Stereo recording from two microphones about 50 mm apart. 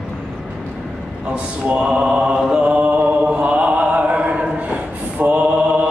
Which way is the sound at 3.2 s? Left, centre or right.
Right.